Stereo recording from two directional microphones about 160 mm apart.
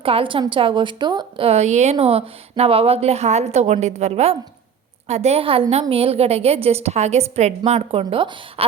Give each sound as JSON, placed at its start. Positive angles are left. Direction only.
{"t": 0.0, "sound": "a woman's voice", "side_deg": -35}